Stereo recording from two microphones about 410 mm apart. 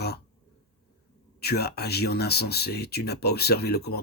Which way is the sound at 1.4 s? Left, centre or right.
Left.